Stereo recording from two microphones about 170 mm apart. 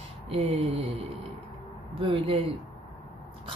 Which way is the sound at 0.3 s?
35° right (ahead or behind).